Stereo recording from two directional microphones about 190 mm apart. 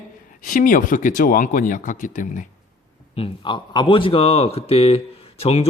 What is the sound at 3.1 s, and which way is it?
A man's voice, 30° left (ahead or behind).